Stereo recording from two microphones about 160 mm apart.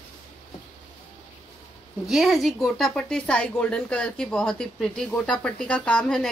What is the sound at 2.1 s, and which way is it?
A woman's voice, centre (ahead or behind).